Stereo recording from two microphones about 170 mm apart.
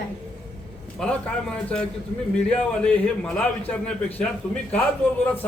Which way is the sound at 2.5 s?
5° left (ahead or behind).